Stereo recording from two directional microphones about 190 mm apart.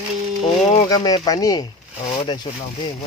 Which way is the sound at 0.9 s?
20° left (ahead or behind).